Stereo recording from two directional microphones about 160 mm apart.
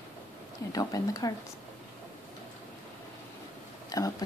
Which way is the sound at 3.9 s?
25° left (ahead or behind).